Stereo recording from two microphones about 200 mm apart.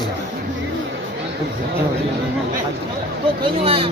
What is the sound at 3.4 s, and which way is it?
Speech, 25° right (ahead or behind).